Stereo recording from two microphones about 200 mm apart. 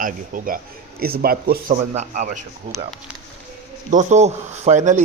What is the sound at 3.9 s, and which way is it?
Speech, 35° right (ahead or behind).